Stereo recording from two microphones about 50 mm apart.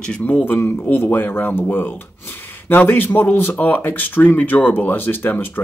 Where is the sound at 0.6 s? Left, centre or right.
Left.